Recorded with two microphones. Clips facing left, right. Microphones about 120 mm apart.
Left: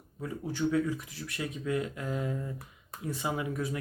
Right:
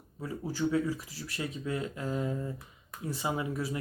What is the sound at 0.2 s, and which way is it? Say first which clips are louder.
Speech: even; 5° right (ahead or behind).